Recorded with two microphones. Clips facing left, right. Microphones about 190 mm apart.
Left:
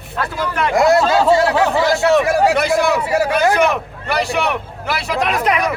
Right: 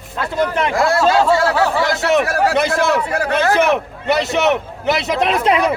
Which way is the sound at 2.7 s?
15° left (ahead or behind).